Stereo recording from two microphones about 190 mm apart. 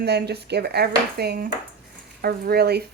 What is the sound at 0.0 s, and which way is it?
Speech, 60° right (ahead or behind).